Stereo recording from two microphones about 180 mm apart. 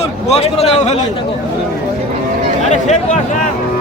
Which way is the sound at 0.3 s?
35° left (ahead or behind).